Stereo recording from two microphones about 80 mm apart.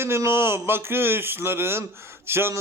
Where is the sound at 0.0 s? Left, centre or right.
Right.